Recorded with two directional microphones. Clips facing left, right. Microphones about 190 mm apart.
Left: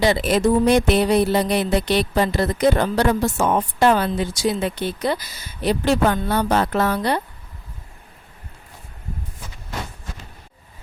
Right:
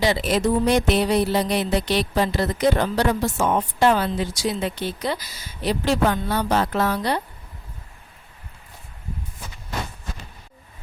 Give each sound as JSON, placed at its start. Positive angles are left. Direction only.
{"t": 0.0, "sound": "speech", "side_deg": 55}